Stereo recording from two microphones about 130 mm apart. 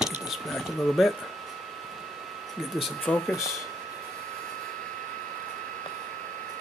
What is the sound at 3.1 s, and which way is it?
Speech, 5° left (ahead or behind).